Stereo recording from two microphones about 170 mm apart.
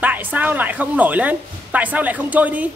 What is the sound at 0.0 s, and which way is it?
Speech, 10° right (ahead or behind).